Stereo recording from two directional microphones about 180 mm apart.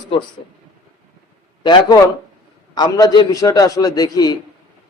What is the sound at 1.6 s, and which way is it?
Speech, 25° left (ahead or behind).